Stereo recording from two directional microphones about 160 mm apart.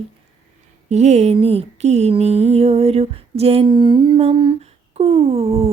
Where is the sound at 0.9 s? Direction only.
45° right (ahead or behind).